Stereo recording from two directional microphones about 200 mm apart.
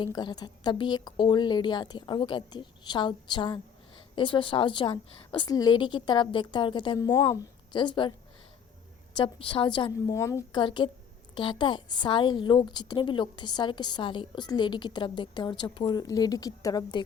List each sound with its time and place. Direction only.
0.0 s a woman's voice: 20° left (ahead or behind)
9.1 s a woman's voice: 25° left (ahead or behind)